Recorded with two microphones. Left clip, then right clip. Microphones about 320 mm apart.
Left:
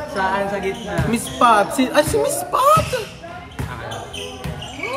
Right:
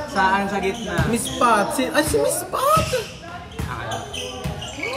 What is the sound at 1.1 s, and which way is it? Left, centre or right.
Speech, centre.